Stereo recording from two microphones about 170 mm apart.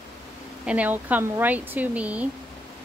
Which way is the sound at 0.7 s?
10° right (ahead or behind).